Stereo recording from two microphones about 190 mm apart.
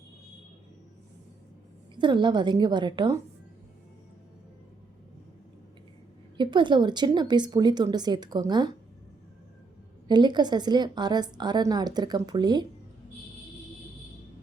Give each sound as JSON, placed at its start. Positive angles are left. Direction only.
{"t": 2.0, "sound": "a woman's voice", "side_deg": -25}
{"t": 6.3, "sound": "a woman's voice", "side_deg": -25}
{"t": 10.1, "sound": "a woman's voice", "side_deg": -25}